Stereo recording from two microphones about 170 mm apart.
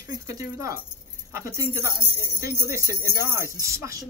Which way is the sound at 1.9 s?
30° right (ahead or behind).